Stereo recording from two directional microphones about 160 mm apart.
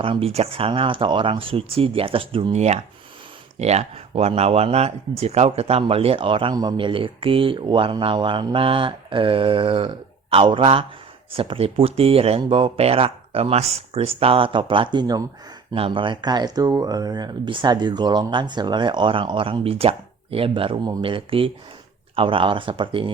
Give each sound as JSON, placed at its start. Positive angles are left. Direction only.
{"t": 0.0, "sound": "speech", "side_deg": -35}